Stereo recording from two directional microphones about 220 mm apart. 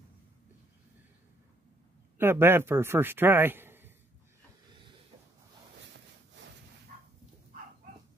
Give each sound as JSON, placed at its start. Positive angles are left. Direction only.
{"t": 2.1, "sound": "speech", "side_deg": -10}
{"t": 6.9, "sound": "dog", "side_deg": -35}